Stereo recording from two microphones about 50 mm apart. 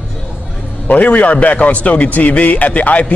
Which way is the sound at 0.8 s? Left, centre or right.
Left.